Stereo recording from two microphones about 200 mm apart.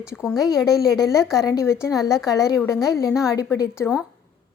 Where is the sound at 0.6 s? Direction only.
15° left (ahead or behind).